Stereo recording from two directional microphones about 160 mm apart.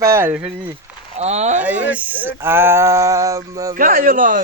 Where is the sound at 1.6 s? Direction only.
10° right (ahead or behind).